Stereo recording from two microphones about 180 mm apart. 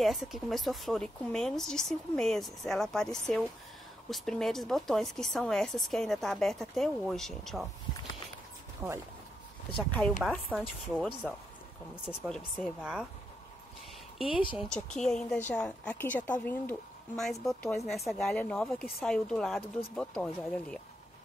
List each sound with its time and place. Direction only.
0.0 s speech: centre (ahead or behind)
8.8 s speech: 15° right (ahead or behind)
9.8 s speech: 5° left (ahead or behind)
14.2 s speech: 30° left (ahead or behind)
14.6 s speech: 5° left (ahead or behind)
17.2 s speech: centre (ahead or behind)